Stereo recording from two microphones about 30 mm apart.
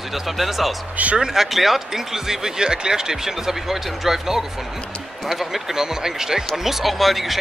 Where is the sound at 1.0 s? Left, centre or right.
Right.